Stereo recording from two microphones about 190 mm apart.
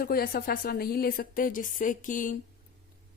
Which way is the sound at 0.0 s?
50° left (ahead or behind).